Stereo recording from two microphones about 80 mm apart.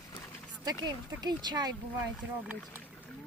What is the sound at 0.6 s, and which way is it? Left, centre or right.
Speech, right.